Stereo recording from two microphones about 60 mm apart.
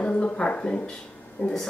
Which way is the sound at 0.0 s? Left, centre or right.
Centre.